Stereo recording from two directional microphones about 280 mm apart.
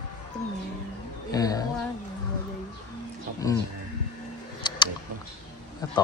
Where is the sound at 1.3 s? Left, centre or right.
Centre.